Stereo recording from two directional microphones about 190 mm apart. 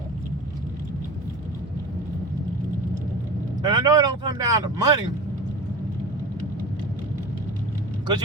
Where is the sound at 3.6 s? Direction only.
20° right (ahead or behind).